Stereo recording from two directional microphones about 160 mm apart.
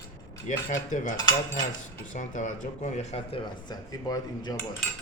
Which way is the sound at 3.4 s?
25° left (ahead or behind).